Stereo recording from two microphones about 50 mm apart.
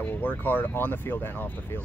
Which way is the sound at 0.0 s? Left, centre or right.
Left.